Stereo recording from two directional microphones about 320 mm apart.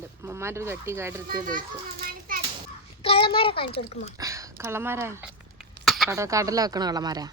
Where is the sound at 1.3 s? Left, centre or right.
Right.